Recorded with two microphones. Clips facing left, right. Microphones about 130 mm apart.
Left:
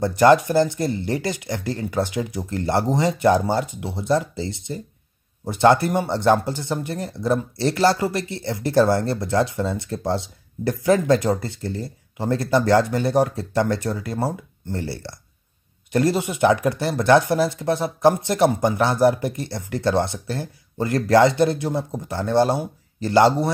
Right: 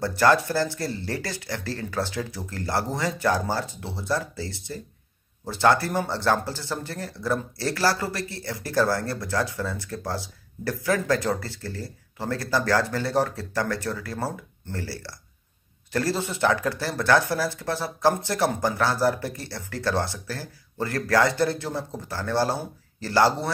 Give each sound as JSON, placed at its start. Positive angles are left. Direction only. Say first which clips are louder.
{"t": 0.0, "sound": "speech", "louder": "left 6 dB", "side_deg": 20}